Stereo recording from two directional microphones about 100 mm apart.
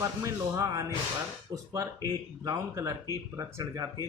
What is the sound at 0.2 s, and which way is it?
Speech, 35° right (ahead or behind).